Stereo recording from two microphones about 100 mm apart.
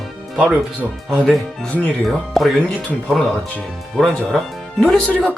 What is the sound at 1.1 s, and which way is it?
Speech, 5° left (ahead or behind).